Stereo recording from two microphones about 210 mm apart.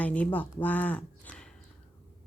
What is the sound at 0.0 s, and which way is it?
Speech, 5° left (ahead or behind).